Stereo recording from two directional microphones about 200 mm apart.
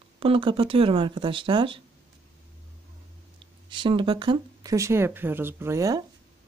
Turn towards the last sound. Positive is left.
turn(degrees=-15)  # may be behind; listen again after turning